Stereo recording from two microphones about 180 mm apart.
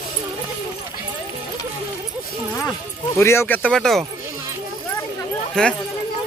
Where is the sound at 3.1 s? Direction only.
15° left (ahead or behind).